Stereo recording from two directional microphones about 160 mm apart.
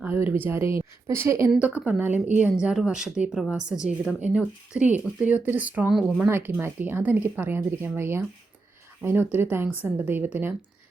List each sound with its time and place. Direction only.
0.0 s speech: 10° right (ahead or behind)